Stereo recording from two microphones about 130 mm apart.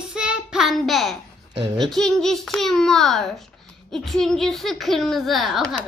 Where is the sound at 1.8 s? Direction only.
5° left (ahead or behind).